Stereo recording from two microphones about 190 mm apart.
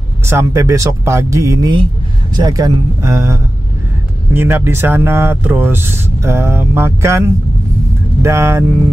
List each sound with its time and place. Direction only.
0.2 s speech: 15° right (ahead or behind)